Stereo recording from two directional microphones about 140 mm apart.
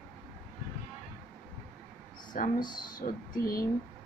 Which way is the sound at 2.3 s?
70° left (ahead or behind).